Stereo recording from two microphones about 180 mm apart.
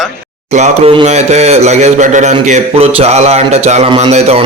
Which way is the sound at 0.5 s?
35° right (ahead or behind).